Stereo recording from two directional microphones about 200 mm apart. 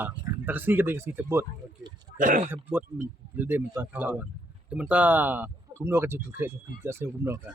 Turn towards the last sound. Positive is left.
turn(degrees=-10)  # may be behind; listen again after turning